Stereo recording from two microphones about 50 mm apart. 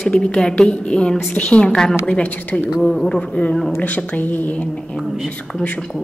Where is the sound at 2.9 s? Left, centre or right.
Centre; by 4.6 s left.